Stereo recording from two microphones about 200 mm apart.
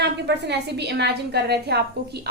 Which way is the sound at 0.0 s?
60° right (ahead or behind).